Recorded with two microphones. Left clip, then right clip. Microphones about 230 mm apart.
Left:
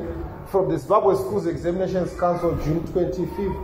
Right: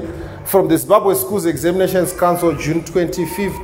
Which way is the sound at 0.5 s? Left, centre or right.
Right.